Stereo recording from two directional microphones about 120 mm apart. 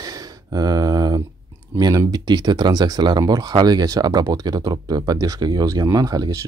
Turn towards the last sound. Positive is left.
turn(degrees=-30)  # may be behind; listen again after turning